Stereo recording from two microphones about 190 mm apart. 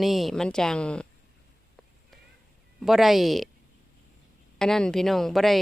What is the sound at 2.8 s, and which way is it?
Speech, centre (ahead or behind).